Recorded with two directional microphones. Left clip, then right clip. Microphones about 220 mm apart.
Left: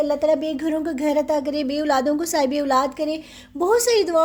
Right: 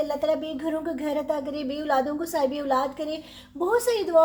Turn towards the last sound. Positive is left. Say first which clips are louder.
# left 4 dB
turn(degrees=50)  # may be behind; listen again after turning